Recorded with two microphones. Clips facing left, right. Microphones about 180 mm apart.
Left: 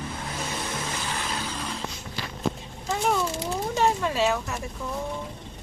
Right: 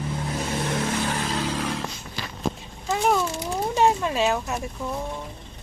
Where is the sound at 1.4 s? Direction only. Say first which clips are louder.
Right 6 dB; 90° right.